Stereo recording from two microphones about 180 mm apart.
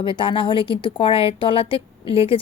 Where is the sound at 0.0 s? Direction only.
30° left (ahead or behind).